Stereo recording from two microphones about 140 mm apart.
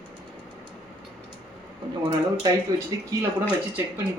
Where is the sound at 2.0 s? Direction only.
30° right (ahead or behind).